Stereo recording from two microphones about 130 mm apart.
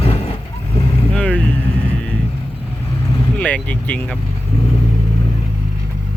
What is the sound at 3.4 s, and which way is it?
Speech, 10° left (ahead or behind).